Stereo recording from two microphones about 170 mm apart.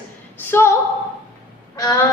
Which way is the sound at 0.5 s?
15° left (ahead or behind).